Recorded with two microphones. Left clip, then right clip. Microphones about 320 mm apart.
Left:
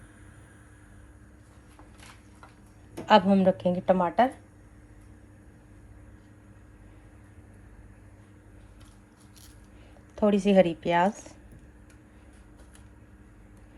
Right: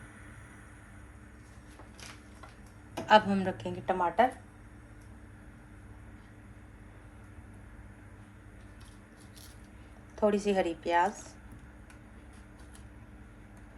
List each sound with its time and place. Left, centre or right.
3.1 s a woman's voice: centre
10.2 s speech: left
11.1 s speech: centre